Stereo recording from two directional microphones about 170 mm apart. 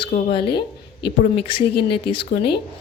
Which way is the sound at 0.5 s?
75° left (ahead or behind).